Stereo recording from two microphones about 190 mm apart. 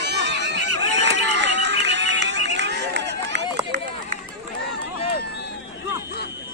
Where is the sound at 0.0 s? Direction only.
65° right (ahead or behind).